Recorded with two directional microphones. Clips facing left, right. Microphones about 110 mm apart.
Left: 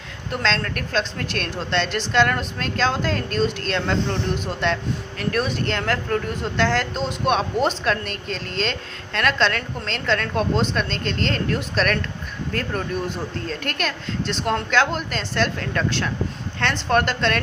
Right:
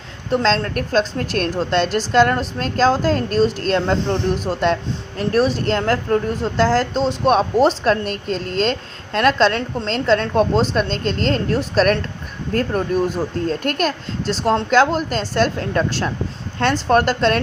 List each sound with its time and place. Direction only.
0.3 s speech: 35° right (ahead or behind)